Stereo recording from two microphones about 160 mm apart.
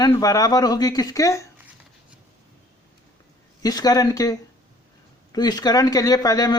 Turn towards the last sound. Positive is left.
turn(degrees=25)  # may be behind; listen again after turning